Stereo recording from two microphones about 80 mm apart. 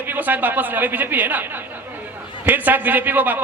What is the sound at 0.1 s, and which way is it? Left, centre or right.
A man's voice, right.